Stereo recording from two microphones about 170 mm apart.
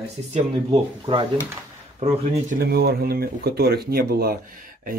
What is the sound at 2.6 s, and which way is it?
Speech, 65° right (ahead or behind).